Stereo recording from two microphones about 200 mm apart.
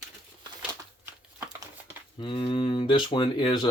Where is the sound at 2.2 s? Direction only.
25° left (ahead or behind).